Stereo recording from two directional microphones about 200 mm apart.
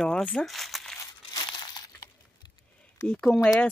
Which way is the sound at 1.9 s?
15° left (ahead or behind).